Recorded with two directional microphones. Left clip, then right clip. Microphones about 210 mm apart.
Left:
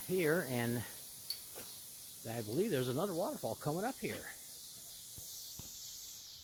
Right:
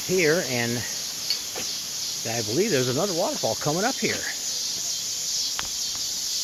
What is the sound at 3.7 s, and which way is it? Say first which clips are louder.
Speech: right 13 dB; 15° left (ahead or behind).